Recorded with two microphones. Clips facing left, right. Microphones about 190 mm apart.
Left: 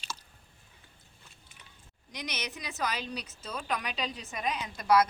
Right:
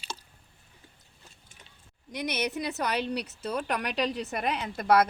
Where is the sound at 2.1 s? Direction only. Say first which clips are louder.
Right 8 dB; 55° right (ahead or behind).